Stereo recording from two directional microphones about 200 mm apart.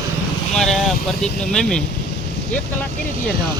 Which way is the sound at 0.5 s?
Centre (ahead or behind).